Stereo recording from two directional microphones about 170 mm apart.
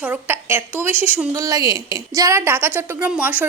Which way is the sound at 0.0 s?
10° right (ahead or behind).